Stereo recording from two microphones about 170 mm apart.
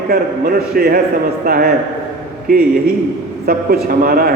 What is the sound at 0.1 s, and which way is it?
A man's voice, 60° right (ahead or behind).